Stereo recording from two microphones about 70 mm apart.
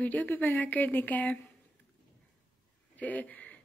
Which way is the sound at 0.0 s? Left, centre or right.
Left.